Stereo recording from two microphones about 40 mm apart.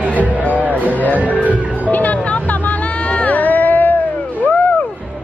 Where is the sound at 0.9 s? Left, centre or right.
Left.